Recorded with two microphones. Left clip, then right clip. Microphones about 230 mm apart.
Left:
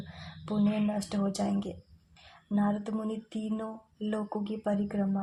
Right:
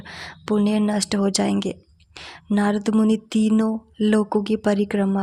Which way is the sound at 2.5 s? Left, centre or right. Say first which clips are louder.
Right 11 dB; right.